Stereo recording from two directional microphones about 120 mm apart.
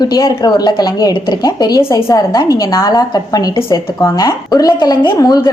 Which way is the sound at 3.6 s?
40° left (ahead or behind).